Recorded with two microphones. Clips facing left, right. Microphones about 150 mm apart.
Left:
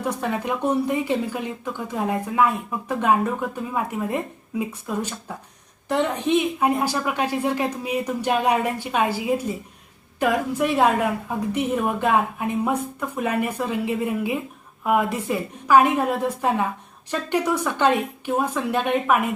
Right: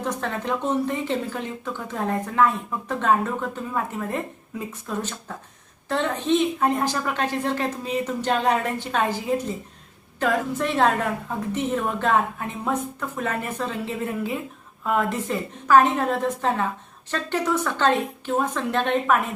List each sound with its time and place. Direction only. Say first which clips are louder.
0.0 s speech: left 2 dB; 10° left (ahead or behind)